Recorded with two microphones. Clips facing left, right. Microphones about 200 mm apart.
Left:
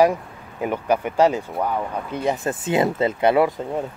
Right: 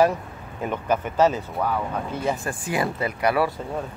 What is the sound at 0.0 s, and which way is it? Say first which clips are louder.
Speech: left 2 dB; 15° left (ahead or behind).